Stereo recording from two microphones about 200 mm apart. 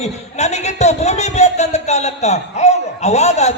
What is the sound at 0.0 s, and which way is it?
A man's voice, 35° left (ahead or behind).